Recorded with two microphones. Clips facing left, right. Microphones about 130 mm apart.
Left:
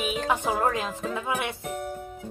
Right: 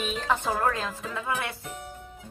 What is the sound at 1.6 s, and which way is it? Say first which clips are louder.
Speech: left 7 dB; 50° left (ahead or behind).